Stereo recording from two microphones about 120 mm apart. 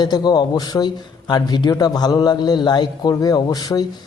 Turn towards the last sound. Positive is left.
turn(degrees=35)  # may be behind; listen again after turning